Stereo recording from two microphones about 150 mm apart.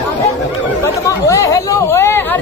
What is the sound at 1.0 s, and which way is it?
Speech, 20° left (ahead or behind).